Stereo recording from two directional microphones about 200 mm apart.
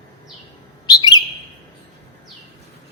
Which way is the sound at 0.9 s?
20° left (ahead or behind).